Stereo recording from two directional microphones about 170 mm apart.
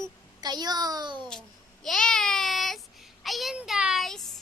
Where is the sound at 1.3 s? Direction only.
Centre (ahead or behind).